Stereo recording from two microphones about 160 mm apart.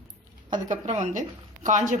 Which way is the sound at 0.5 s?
50° right (ahead or behind).